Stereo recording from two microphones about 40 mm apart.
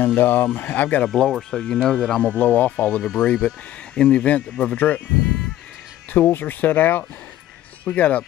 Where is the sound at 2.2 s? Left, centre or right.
Left.